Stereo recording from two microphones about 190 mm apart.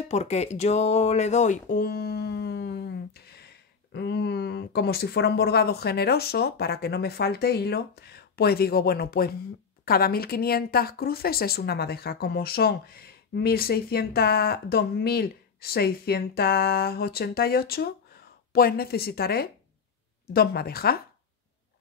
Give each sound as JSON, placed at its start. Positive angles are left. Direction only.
{"t": 0.1, "sound": "speech", "side_deg": 35}